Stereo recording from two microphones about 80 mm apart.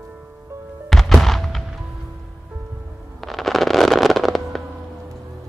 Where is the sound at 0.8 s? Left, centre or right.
Centre.